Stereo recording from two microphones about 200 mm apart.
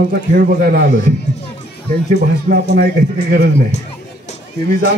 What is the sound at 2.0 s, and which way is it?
Speech, 50° right (ahead or behind).